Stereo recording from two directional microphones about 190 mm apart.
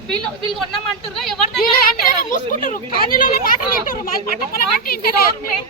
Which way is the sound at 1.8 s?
45° left (ahead or behind).